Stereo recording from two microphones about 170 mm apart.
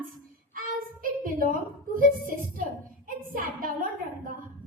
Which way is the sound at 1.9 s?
55° right (ahead or behind).